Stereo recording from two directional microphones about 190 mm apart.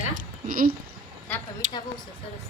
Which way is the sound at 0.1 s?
45° right (ahead or behind).